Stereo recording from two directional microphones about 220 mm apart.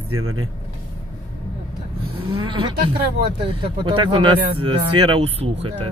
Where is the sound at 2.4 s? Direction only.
20° right (ahead or behind).